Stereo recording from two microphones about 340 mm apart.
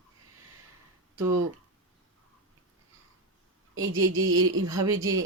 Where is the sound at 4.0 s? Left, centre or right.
Right.